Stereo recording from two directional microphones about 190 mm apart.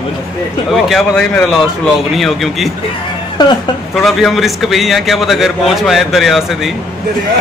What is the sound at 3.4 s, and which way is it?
Speech, 20° left (ahead or behind).